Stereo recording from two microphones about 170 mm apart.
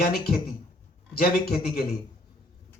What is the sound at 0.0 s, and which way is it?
A man's voice, 65° left (ahead or behind).